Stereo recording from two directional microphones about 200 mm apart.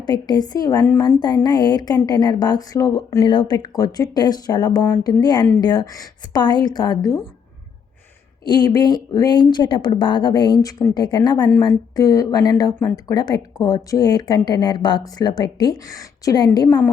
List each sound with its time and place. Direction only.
0.0 s a woman's voice: 20° left (ahead or behind)
8.4 s a woman's voice: 20° left (ahead or behind)